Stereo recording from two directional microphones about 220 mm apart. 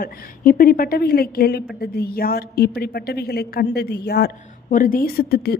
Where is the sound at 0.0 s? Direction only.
40° left (ahead or behind).